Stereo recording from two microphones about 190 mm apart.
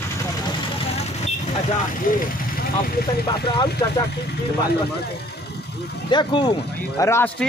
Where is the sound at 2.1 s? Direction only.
45° left (ahead or behind).